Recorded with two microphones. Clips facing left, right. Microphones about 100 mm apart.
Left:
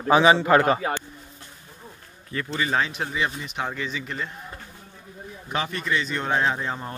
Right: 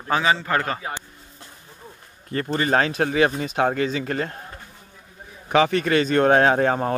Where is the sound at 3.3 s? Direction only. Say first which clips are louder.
Right 9 dB; 50° right (ahead or behind).